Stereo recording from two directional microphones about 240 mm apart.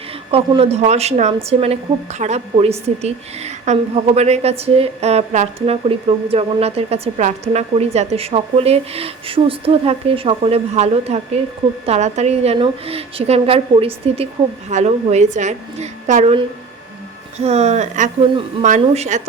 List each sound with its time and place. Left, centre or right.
0.3 s a woman's voice: right